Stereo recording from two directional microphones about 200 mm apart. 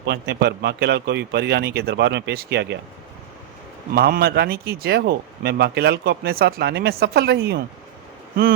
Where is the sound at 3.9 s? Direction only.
50° right (ahead or behind).